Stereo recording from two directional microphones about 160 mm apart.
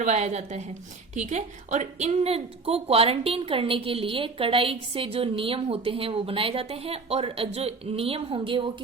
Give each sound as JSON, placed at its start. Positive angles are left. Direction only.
{"t": 0.0, "sound": "a woman's voice", "side_deg": -45}